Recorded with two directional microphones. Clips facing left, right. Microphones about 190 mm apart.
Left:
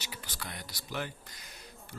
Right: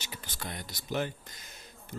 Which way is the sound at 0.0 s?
25° right (ahead or behind).